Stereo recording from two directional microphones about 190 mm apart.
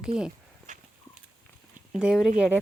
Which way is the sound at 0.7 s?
40° right (ahead or behind).